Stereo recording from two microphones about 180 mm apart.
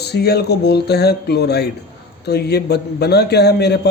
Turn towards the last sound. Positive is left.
turn(degrees=65)  # may be behind; listen again after turning